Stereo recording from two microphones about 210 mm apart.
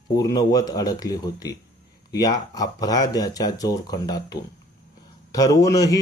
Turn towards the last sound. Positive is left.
turn(degrees=15)  # may be behind; listen again after turning